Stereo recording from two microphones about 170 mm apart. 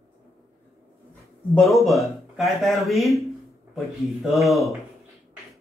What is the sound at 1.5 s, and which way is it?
Speech, centre (ahead or behind).